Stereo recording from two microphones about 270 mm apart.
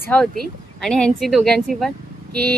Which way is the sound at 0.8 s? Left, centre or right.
Centre.